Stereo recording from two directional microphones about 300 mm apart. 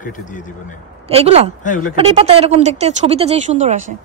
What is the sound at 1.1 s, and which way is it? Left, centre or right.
Speech, centre.